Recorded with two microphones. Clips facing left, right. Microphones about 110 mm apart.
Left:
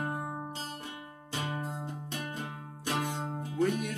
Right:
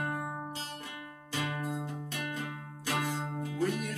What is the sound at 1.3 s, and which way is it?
Music, 30° left (ahead or behind).